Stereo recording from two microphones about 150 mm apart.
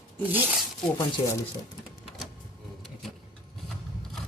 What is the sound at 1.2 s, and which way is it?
Speech, 35° left (ahead or behind).